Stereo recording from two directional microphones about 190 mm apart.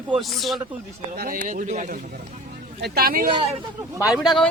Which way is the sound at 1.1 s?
50° right (ahead or behind).